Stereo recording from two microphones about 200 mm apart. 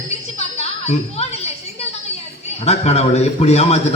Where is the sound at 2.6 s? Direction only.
30° left (ahead or behind).